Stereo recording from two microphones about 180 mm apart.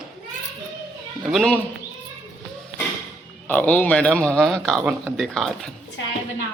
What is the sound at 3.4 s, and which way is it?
Speech, 10° left (ahead or behind).